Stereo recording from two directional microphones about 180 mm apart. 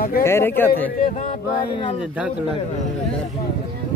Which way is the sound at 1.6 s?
30° left (ahead or behind).